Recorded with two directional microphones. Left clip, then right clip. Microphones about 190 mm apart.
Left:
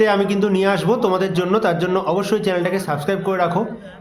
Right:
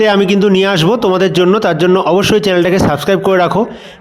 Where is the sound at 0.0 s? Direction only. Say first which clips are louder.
Right 6 dB; 45° right (ahead or behind).